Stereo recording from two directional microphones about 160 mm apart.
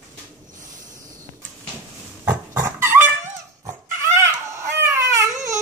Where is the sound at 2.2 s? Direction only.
20° right (ahead or behind).